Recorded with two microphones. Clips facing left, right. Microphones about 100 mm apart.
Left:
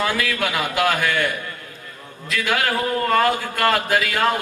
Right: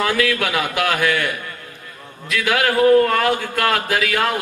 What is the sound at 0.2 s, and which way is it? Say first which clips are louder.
A man's voice: right 3 dB; 25° left (ahead or behind).